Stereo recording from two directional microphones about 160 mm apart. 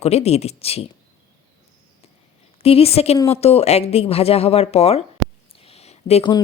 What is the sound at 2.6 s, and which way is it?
Speech, 40° left (ahead or behind).